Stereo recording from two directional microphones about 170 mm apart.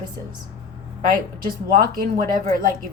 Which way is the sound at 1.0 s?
55° right (ahead or behind).